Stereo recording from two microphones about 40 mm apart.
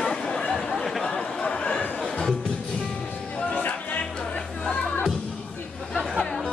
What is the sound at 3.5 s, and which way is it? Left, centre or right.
Music, left.